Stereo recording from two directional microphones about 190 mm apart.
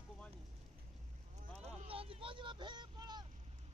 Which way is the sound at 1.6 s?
30° right (ahead or behind).